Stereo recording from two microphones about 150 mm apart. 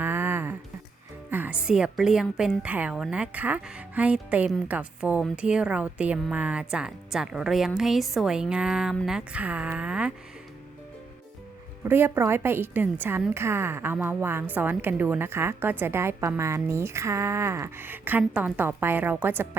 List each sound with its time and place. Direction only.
0.0 s a sound: 15° right (ahead or behind)
1.3 s a woman's voice: 10° right (ahead or behind)
11.9 s a woman's voice: 15° right (ahead or behind)